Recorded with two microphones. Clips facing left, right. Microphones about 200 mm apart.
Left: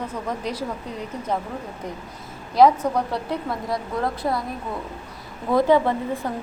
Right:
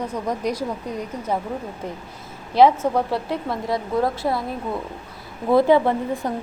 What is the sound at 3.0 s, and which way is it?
Speech, 5° right (ahead or behind).